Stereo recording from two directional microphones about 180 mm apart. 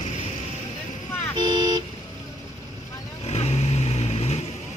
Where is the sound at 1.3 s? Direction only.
25° right (ahead or behind).